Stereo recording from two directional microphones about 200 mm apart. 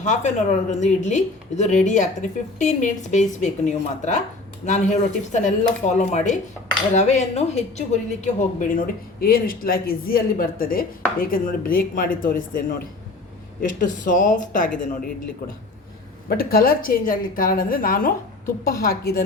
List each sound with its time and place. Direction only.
0.0 s a woman's voice: 35° left (ahead or behind)
16.3 s speech: 50° left (ahead or behind)